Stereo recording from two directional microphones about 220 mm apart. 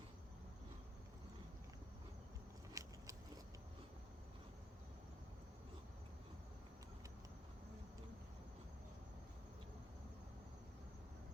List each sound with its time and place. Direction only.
2.8 s vehicle: 15° right (ahead or behind)